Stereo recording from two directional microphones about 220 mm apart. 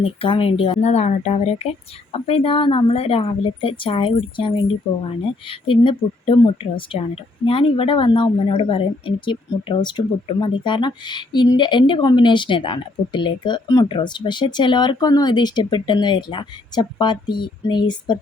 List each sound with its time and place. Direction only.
0.0 s a woman's voice: 25° left (ahead or behind)